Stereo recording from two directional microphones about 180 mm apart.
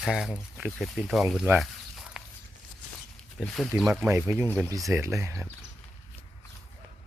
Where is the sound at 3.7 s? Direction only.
5° right (ahead or behind).